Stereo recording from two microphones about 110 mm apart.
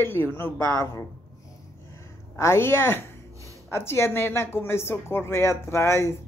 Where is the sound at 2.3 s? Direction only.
25° left (ahead or behind).